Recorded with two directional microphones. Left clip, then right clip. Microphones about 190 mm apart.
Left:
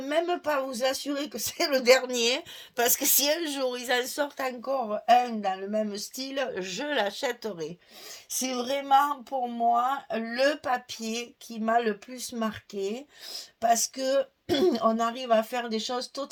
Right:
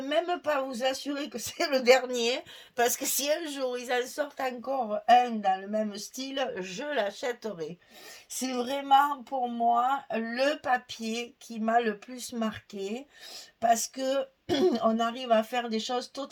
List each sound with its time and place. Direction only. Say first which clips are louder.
0.0 s speech: left 1 dB; 35° left (ahead or behind)